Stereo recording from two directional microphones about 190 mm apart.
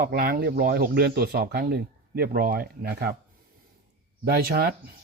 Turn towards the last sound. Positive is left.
turn(degrees=-55)  # may be behind; listen again after turning